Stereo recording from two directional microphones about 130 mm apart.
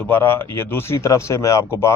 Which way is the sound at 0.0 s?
15° left (ahead or behind).